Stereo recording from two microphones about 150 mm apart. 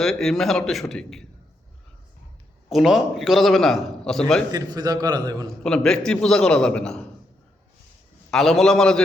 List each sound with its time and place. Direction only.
0.0 s a man's voice: 5° left (ahead or behind)
2.6 s a man's voice: centre (ahead or behind)
4.5 s a man's voice: 25° right (ahead or behind)
5.6 s a man's voice: 5° left (ahead or behind)
8.3 s a man's voice: centre (ahead or behind)